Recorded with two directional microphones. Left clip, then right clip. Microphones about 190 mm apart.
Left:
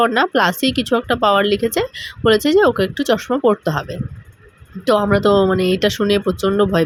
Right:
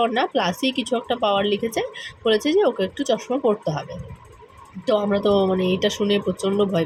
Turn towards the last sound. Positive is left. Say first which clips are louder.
# left 5 dB
turn(degrees=30)  # may be behind; listen again after turning